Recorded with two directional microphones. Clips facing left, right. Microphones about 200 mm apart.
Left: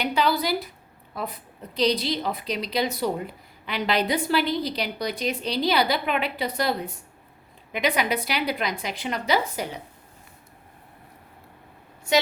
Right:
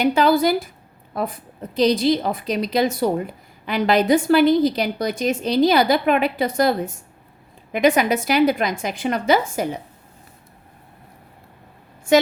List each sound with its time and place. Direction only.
0.0 s a woman's voice: 45° right (ahead or behind)